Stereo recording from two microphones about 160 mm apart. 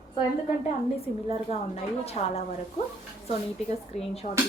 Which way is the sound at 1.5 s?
40° left (ahead or behind).